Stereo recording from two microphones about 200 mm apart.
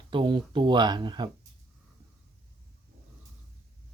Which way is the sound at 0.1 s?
25° right (ahead or behind).